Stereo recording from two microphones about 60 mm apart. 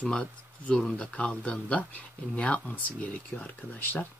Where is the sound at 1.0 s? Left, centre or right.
Centre.